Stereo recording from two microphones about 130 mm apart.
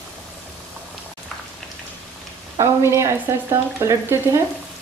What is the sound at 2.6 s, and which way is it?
A woman's voice, 20° right (ahead or behind).